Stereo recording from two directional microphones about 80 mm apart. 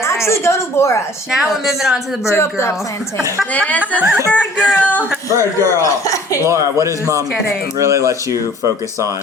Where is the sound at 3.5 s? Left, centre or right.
Centre.